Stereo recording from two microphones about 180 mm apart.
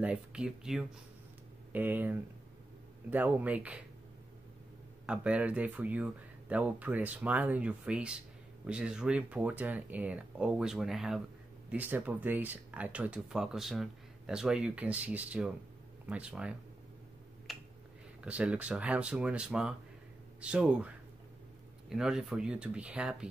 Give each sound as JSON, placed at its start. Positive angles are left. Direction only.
{"t": 0.0, "sound": "speech", "side_deg": -5}
{"t": 5.0, "sound": "speech", "side_deg": -5}
{"t": 17.5, "sound": "finger snapping", "side_deg": 0}
{"t": 18.2, "sound": "speech", "side_deg": -5}